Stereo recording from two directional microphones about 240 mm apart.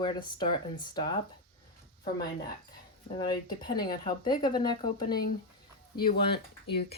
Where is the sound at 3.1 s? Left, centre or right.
Centre.